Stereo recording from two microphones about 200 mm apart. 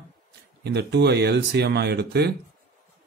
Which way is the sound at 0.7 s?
55° right (ahead or behind).